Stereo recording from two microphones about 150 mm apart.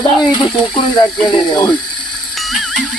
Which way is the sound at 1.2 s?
30° left (ahead or behind).